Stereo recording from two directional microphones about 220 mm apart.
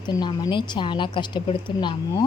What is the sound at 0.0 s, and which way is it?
Speech, 20° left (ahead or behind).